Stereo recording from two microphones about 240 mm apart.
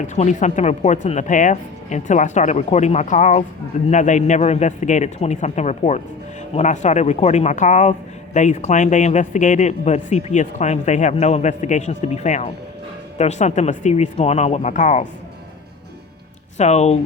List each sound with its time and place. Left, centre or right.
0.0 s speech: left
16.6 s speech: left